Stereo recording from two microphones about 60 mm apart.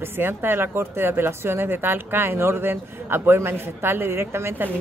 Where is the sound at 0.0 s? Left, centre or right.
Right.